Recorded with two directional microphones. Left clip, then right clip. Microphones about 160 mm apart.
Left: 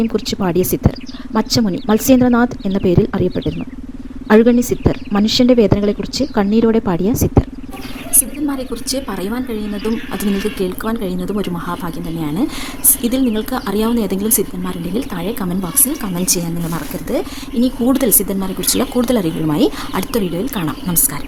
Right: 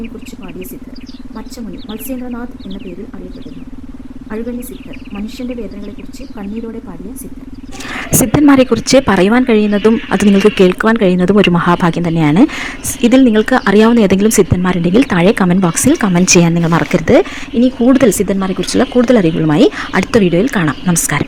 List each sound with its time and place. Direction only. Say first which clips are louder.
0.3 s speech: left 12 dB; 55° left (ahead or behind)
4.3 s speech: left 12 dB; 60° left (ahead or behind)
8.1 s speech: right 13 dB; 45° right (ahead or behind)
17.6 s speech: right 6 dB; 15° right (ahead or behind)